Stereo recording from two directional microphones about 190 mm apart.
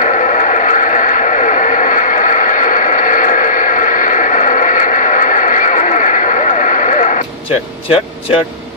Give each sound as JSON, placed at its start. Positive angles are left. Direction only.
{"t": 0.0, "sound": "radio", "side_deg": 40}